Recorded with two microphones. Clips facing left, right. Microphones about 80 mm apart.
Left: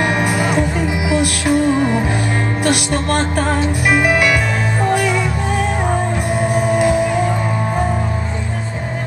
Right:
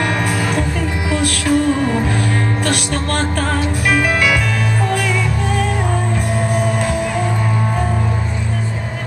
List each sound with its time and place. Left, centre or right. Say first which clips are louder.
0.0 s music: left 2 dB; centre